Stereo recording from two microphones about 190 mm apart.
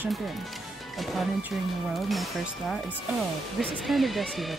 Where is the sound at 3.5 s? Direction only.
Centre (ahead or behind).